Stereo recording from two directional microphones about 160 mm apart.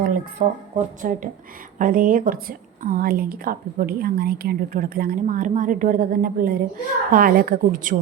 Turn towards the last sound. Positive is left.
turn(degrees=-60)  # may be behind; listen again after turning